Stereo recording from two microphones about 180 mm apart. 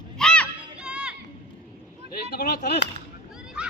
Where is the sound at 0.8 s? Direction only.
5° right (ahead or behind).